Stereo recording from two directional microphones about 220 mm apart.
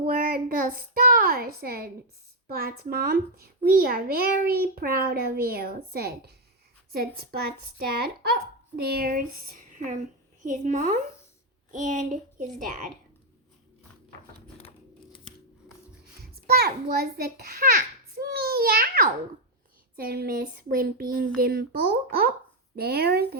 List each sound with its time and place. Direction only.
0.0 s child singing: 40° right (ahead or behind)
2.5 s a child's voice: 45° right (ahead or behind)
10.4 s speech: 35° right (ahead or behind)
16.3 s a child's voice: 45° right (ahead or behind)